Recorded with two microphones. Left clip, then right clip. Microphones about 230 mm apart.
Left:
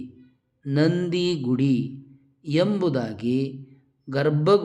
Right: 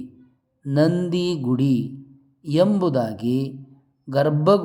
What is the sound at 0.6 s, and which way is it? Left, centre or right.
Speech, centre.